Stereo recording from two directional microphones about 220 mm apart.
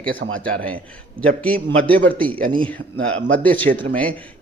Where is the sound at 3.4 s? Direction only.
5° left (ahead or behind).